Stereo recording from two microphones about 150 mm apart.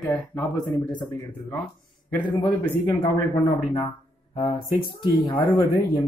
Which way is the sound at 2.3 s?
30° left (ahead or behind).